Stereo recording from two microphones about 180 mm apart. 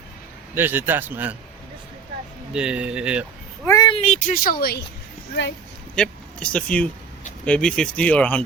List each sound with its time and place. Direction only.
0.5 s a man's voice: 10° right (ahead or behind)
2.5 s speech: 5° right (ahead or behind)
3.7 s speech: 25° left (ahead or behind); by 4.9 s 60° left (ahead or behind)
6.0 s speech: 5° left (ahead or behind)